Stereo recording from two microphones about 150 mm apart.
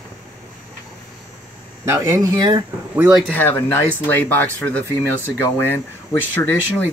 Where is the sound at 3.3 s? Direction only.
10° left (ahead or behind).